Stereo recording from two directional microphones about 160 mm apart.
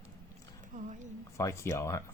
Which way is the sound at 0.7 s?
50° right (ahead or behind).